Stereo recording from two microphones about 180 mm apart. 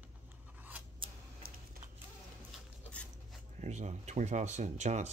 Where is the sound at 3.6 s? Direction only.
40° right (ahead or behind).